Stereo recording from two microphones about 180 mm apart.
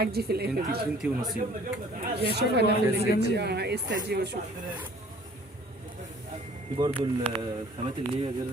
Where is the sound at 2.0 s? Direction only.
65° right (ahead or behind).